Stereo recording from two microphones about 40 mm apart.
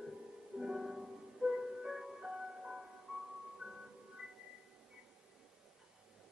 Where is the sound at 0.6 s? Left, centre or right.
Centre.